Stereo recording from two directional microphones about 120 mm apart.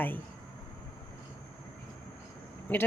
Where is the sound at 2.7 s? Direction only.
15° left (ahead or behind).